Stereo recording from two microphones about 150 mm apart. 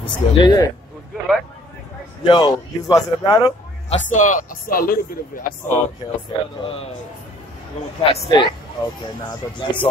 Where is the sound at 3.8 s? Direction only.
55° left (ahead or behind); by 5.4 s 70° left (ahead or behind).